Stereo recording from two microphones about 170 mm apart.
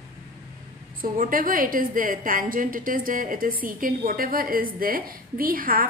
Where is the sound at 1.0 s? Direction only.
55° right (ahead or behind).